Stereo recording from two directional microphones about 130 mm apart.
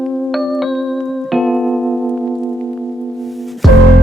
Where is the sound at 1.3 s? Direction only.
Centre (ahead or behind).